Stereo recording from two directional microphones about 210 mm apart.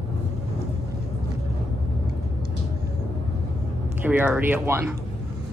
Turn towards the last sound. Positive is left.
turn(degrees=-10)  # may be behind; listen again after turning